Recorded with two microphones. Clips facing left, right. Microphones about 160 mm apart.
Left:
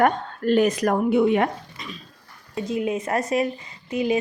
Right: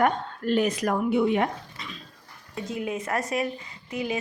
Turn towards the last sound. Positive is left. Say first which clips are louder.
# left 7 dB
turn(degrees=20)  # may be behind; listen again after turning